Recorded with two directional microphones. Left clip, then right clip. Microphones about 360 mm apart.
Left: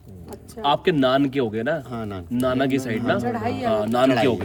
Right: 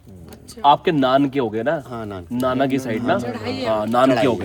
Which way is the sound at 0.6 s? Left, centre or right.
Centre.